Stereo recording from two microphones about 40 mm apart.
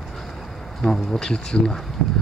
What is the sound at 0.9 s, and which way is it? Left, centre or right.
Speech, centre.